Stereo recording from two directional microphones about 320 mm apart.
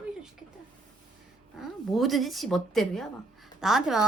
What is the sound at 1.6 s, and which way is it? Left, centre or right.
Speech, centre.